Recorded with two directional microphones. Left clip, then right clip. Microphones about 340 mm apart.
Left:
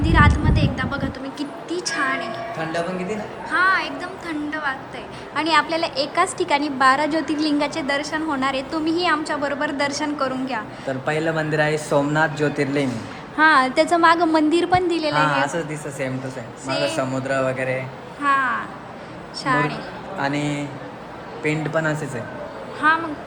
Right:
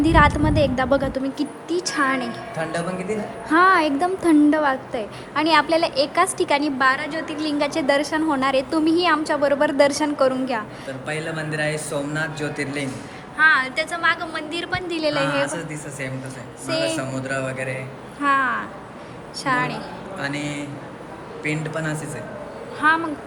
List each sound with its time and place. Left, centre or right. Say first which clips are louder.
0.0 s a woman's voice: right 2 dB; centre
2.6 s a woman's voice: right 1 dB; centre
10.8 s a man's voice: left 5 dB; left
13.3 s a woman's voice: left 2 dB; centre
16.6 s a woman's voice: even; centre
16.9 s a woman's voice: left 3 dB; centre
18.2 s a woman's voice: even; centre
20.1 s a man's voice: left 4 dB; centre
22.8 s a woman's voice: even; centre